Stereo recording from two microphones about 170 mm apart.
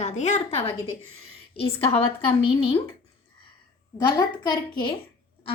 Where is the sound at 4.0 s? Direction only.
25° left (ahead or behind).